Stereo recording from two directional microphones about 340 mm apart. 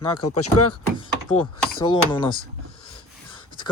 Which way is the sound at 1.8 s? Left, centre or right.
Centre.